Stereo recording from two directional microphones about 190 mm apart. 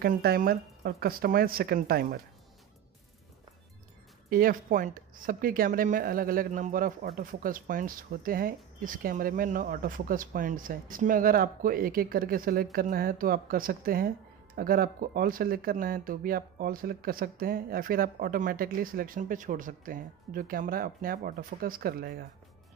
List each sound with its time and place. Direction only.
0.0 s speech: 55° right (ahead or behind)
4.3 s speech: 50° right (ahead or behind)